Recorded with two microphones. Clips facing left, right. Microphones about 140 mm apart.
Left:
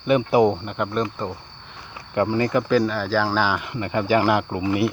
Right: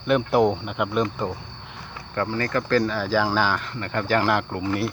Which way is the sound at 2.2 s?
20° left (ahead or behind).